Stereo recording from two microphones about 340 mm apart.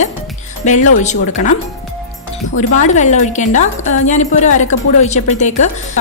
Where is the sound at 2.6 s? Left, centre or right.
Left.